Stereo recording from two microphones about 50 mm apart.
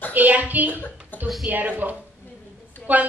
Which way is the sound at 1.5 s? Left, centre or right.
Right.